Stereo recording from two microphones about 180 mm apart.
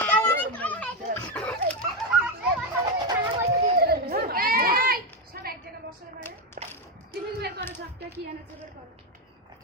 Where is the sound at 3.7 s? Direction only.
60° right (ahead or behind).